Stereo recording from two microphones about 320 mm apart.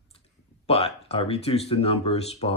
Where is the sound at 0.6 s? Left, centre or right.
Centre.